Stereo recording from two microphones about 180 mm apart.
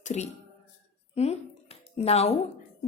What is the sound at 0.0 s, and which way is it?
A woman's voice, 40° left (ahead or behind).